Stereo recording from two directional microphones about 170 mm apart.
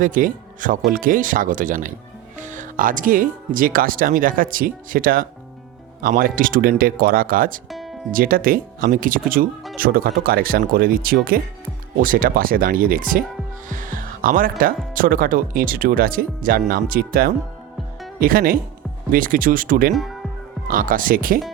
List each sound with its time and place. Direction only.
0.0 s speech: 55° right (ahead or behind)
7.7 s music: centre (ahead or behind)
8.1 s speech: 55° right (ahead or behind)
13.7 s music: 50° right (ahead or behind)
14.9 s speech: 55° right (ahead or behind)
19.9 s speech: centre (ahead or behind)
20.7 s speech: 55° right (ahead or behind)